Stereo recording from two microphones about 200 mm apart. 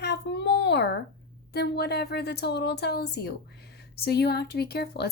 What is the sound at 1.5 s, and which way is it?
Speech, 55° left (ahead or behind).